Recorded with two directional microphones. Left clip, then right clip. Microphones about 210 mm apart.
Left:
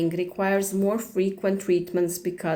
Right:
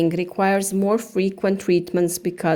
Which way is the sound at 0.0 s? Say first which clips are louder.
Right 5 dB; 45° right (ahead or behind).